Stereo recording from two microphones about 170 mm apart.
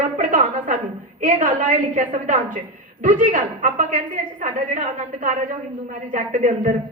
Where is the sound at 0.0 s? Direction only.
50° right (ahead or behind).